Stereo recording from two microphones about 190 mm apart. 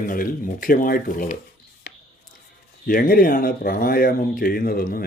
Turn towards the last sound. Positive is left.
turn(degrees=50)  # may be behind; listen again after turning